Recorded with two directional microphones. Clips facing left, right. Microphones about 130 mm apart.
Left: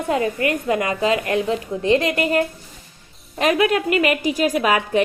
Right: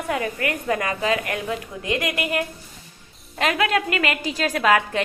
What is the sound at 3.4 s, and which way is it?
A woman's voice, 20° left (ahead or behind).